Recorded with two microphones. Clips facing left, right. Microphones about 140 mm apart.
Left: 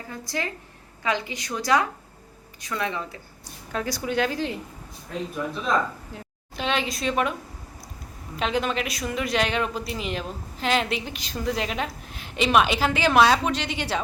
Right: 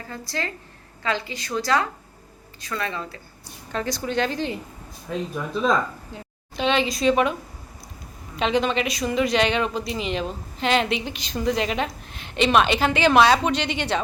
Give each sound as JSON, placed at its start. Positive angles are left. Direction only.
{"t": 0.1, "sound": "a woman's voice", "side_deg": 15}
{"t": 5.1, "sound": "speech", "side_deg": -90}
{"t": 6.1, "sound": "speech", "side_deg": 0}
{"t": 8.4, "sound": "speech", "side_deg": 0}